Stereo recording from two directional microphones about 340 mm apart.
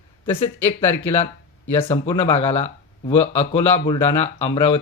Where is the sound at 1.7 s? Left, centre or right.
Centre.